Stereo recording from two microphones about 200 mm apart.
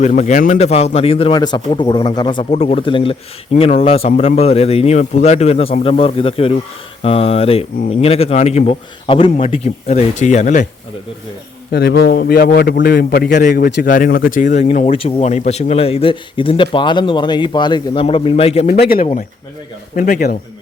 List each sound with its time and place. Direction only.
0.0 s a man's voice: 35° left (ahead or behind)
11.7 s a man's voice: 55° left (ahead or behind); by 18.7 s 30° left (ahead or behind)
18.7 s a man's voice: 45° left (ahead or behind)